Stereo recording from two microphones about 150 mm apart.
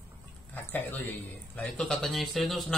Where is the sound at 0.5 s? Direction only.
15° left (ahead or behind).